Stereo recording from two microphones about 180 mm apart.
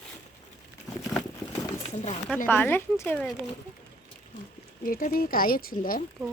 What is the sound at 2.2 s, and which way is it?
Speech, 5° left (ahead or behind).